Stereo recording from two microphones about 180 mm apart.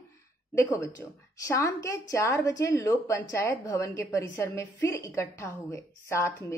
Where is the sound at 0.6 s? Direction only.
15° left (ahead or behind).